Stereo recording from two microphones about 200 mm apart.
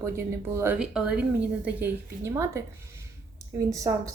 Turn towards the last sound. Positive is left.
turn(degrees=-15)  # may be behind; listen again after turning